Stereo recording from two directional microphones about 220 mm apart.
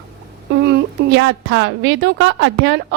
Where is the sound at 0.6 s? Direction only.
50° right (ahead or behind).